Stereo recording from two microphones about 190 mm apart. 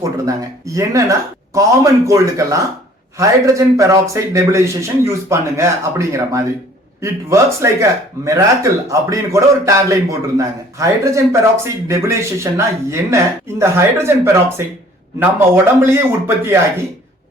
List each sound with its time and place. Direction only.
0.0 s speech: 15° right (ahead or behind)